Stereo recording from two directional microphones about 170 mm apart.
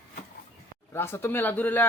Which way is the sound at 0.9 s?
15° left (ahead or behind).